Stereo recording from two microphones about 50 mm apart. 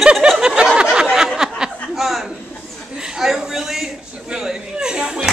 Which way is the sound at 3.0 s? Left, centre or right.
Centre.